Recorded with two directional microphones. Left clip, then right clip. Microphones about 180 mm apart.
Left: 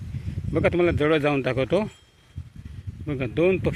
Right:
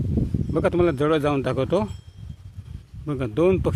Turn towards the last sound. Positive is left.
turn(degrees=-10)  # may be behind; listen again after turning